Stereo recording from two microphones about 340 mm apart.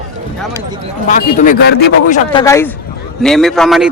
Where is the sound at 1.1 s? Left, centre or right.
Left.